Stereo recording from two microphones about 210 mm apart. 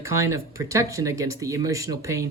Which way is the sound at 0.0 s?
15° right (ahead or behind).